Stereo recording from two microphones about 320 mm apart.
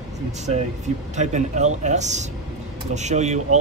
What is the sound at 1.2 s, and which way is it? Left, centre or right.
Speech, right.